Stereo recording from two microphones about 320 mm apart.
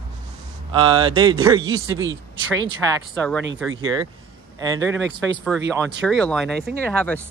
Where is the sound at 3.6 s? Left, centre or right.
Centre.